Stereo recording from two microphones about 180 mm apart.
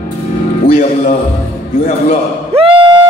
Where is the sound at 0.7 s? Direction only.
50° left (ahead or behind).